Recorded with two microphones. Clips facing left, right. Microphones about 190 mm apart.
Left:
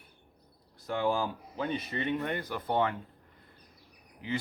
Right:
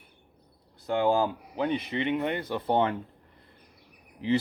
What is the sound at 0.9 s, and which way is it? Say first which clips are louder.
Speech: right 5 dB; 25° right (ahead or behind).